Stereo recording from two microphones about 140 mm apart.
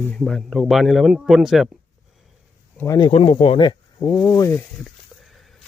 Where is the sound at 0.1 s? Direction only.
5° left (ahead or behind).